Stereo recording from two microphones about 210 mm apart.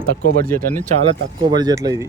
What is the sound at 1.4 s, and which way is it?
Speech, 20° right (ahead or behind).